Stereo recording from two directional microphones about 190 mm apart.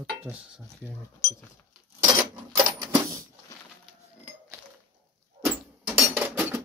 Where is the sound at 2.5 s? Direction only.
20° right (ahead or behind).